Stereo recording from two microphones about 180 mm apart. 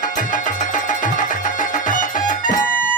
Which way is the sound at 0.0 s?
45° left (ahead or behind).